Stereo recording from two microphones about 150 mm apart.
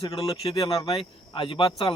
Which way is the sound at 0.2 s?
40° left (ahead or behind).